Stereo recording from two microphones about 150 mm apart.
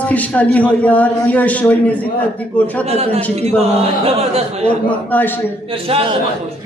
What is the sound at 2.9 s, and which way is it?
Speech, 45° right (ahead or behind).